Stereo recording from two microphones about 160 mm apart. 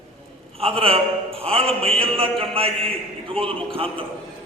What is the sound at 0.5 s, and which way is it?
A man's voice, 35° right (ahead or behind).